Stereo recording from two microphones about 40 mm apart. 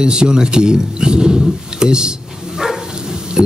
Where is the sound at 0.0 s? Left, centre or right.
Right.